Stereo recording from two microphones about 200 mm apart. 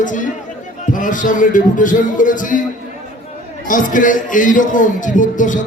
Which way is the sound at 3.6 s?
40° left (ahead or behind).